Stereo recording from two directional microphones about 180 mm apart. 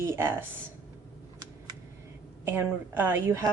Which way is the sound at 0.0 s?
15° right (ahead or behind).